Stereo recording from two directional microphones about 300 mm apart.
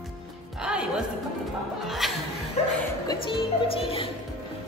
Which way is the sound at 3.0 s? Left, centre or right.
Centre.